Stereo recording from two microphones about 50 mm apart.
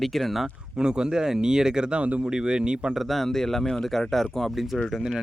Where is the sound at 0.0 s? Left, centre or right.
Centre.